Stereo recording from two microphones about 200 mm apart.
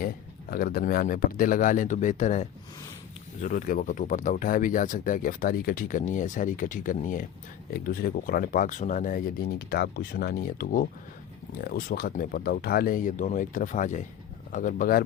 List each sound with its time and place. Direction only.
0.5 s speech: 50° left (ahead or behind)